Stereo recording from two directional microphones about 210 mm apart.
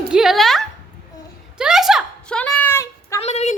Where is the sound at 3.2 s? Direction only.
30° left (ahead or behind).